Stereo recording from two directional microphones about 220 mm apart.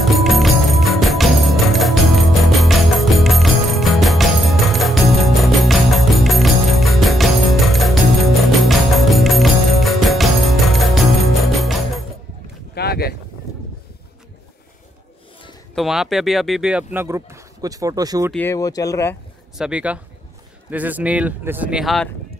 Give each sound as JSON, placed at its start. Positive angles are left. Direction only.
{"t": 0.0, "sound": "music", "side_deg": 0}
{"t": 12.7, "sound": "boat", "side_deg": 45}
{"t": 15.7, "sound": "speech", "side_deg": 0}
{"t": 18.3, "sound": "speech", "side_deg": 10}
{"t": 19.6, "sound": "speech", "side_deg": -5}